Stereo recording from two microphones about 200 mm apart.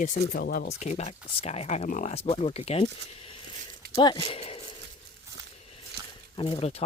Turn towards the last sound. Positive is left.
turn(degrees=30)  # may be behind; listen again after turning